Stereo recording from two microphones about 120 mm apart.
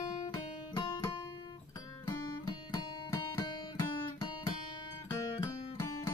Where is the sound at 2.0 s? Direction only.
25° left (ahead or behind).